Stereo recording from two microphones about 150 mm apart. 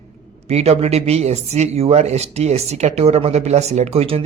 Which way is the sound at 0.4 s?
45° right (ahead or behind).